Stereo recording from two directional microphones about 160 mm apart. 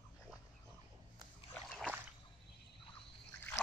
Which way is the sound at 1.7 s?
Centre (ahead or behind).